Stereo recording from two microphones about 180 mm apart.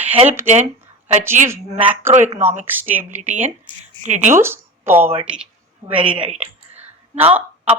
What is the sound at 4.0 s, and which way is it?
Speech, 40° right (ahead or behind).